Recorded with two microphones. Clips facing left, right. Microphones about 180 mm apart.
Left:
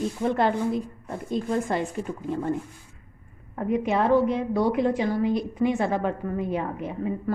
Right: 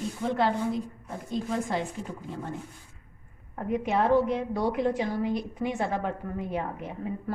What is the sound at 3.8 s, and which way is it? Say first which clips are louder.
A woman's voice: left 2 dB; 90° left.